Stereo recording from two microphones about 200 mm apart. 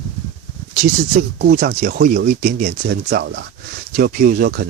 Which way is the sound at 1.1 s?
45° right (ahead or behind).